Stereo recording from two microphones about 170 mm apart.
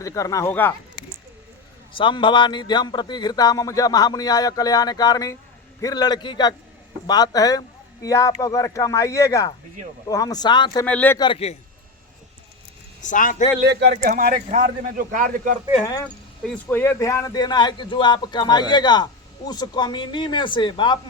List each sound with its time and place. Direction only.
0.0 s speech: 20° left (ahead or behind)
1.9 s a man's voice: 30° left (ahead or behind)
10.8 s speech: 10° left (ahead or behind)
11.2 s a man's voice: 35° left (ahead or behind)
13.0 s speech: 50° left (ahead or behind)
13.7 s speech: 85° right
14.1 s speech: 55° right (ahead or behind)
15.8 s a man's voice: 20° left (ahead or behind)
16.0 s a man's voice: 10° left (ahead or behind); by 21.0 s 25° left (ahead or behind)